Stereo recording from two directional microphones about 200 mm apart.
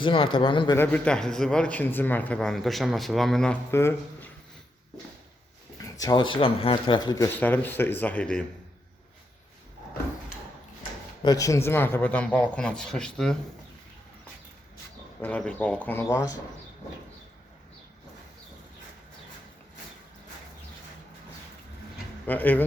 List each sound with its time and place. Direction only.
0.0 s speech: 25° left (ahead or behind)
0.8 s speech: 10° left (ahead or behind)
5.8 s speech: 20° left (ahead or behind)
7.2 s a man's voice: 10° left (ahead or behind)
11.2 s a man's voice: 20° left (ahead or behind)
15.2 s a man's voice: 5° left (ahead or behind)
22.3 s a man's voice: 10° left (ahead or behind)